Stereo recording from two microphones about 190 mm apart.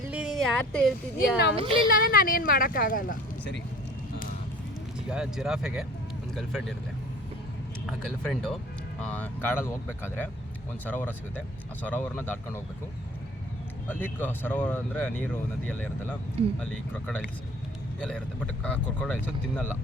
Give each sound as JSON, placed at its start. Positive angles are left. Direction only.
{"t": 0.1, "sound": "speech", "side_deg": -5}
{"t": 1.5, "sound": "a woman's voice", "side_deg": -30}
{"t": 1.9, "sound": "speech", "side_deg": 50}
{"t": 5.0, "sound": "speech", "side_deg": -5}
{"t": 7.9, "sound": "speech", "side_deg": 0}
{"t": 13.8, "sound": "speech", "side_deg": 10}